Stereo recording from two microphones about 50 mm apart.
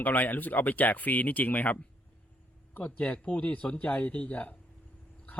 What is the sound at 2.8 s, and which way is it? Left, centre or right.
Speech, left.